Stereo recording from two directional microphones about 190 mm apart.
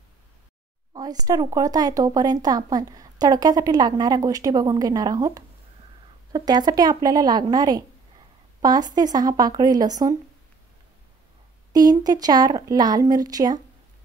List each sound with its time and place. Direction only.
0.9 s speech: 20° right (ahead or behind)
11.7 s speech: 20° right (ahead or behind)